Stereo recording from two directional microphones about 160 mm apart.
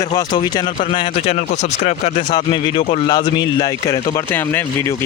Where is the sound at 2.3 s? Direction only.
30° left (ahead or behind).